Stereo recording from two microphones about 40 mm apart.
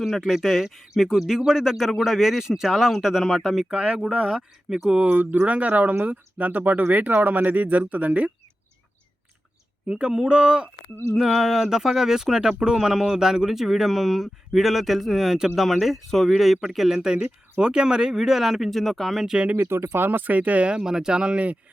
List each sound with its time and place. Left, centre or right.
0.3 s speech: centre
3.7 s speech: right
4.4 s speech: centre
5.0 s speech: right
5.5 s speech: right
9.9 s speech: right
11.1 s speech: centre
17.0 s speech: centre
19.5 s speech: right
20.1 s speech: right
20.7 s speech: centre
21.3 s speech: right